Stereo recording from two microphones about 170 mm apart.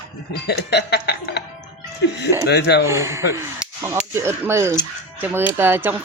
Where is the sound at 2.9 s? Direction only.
15° right (ahead or behind).